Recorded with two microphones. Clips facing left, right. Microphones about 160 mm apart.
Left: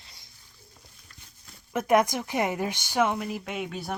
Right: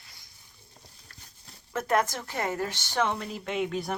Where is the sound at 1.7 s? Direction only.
15° left (ahead or behind).